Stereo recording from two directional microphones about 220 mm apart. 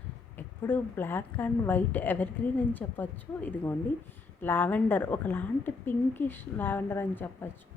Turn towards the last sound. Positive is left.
turn(degrees=10)  # may be behind; listen again after turning